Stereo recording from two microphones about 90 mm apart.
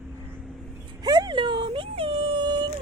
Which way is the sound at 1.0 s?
55° right (ahead or behind).